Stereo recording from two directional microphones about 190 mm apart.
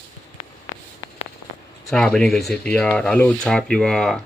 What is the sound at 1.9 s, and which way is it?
Speech, 5° left (ahead or behind).